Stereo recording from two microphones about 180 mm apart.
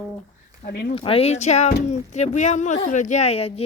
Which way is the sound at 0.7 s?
65° left (ahead or behind).